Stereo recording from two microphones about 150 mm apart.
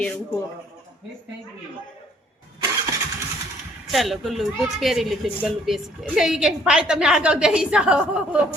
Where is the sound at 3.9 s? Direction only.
Centre (ahead or behind).